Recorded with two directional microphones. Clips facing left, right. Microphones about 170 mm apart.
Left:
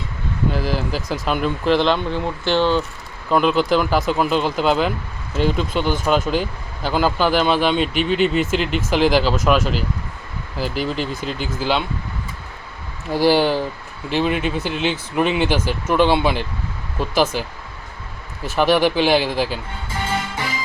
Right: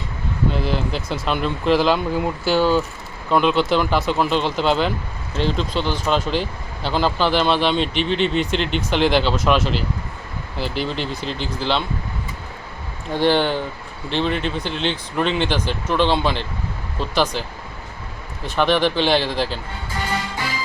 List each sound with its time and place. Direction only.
0.7 s speech: 5° left (ahead or behind)
1.0 s speech: 40° left (ahead or behind)
1.3 s speech: 5° left (ahead or behind)
10.8 s speech: 5° left (ahead or behind)
13.1 s speech: 10° left (ahead or behind)
18.4 s speech: 5° left (ahead or behind)